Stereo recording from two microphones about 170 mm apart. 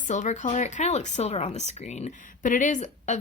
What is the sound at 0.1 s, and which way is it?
A woman's voice, 45° left (ahead or behind).